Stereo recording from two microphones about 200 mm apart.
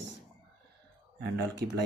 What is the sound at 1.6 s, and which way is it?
Speech, 50° right (ahead or behind).